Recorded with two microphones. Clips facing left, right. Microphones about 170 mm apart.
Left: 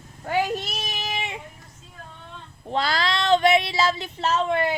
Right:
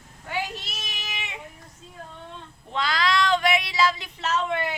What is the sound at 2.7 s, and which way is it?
Female singing, 35° left (ahead or behind).